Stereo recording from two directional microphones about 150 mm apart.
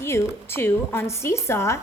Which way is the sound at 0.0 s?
15° left (ahead or behind).